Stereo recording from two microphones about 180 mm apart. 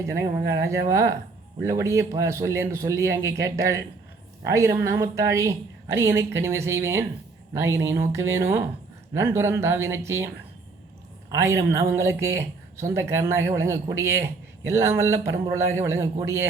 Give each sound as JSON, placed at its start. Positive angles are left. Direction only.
{"t": 0.0, "sound": "speech", "side_deg": -15}
{"t": 11.3, "sound": "speech", "side_deg": -15}